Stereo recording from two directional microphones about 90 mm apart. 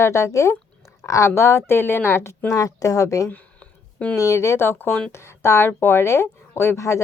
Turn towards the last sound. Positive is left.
turn(degrees=35)  # may be behind; listen again after turning